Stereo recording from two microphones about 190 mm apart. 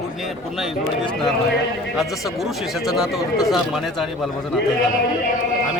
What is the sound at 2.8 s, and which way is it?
Speech, centre (ahead or behind).